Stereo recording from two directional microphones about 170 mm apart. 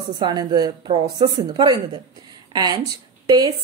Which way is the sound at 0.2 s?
25° right (ahead or behind).